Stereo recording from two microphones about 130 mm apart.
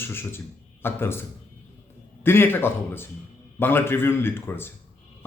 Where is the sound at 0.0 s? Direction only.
20° left (ahead or behind).